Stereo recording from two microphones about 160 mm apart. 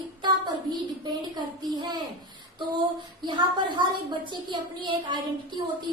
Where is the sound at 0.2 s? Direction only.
25° right (ahead or behind).